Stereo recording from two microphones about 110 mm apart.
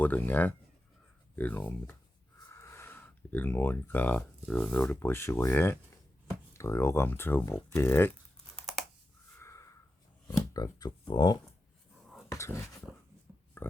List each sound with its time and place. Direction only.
0.0 s speech: 15° left (ahead or behind)
8.5 s computer keyboard: centre (ahead or behind)
9.4 s sniff: 30° left (ahead or behind)
10.2 s speech: 30° left (ahead or behind)
12.3 s speech: 25° left (ahead or behind)
13.3 s pig: 15° right (ahead or behind)